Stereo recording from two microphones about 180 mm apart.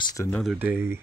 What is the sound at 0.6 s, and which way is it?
Speech, 10° right (ahead or behind).